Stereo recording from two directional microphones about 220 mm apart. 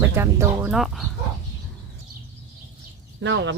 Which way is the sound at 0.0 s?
10° right (ahead or behind).